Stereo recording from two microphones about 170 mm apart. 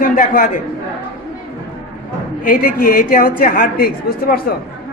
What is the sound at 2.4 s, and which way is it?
A woman's voice, 55° left (ahead or behind).